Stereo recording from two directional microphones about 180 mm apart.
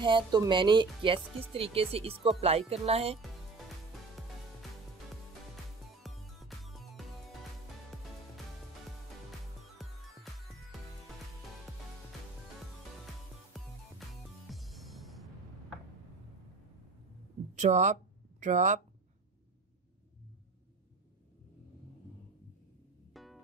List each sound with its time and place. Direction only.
0.0 s speech: 25° right (ahead or behind)
6.0 s music: centre (ahead or behind)
9.8 s music: centre (ahead or behind)
13.5 s music: centre (ahead or behind)
17.6 s speech: 40° right (ahead or behind)
23.1 s music: centre (ahead or behind)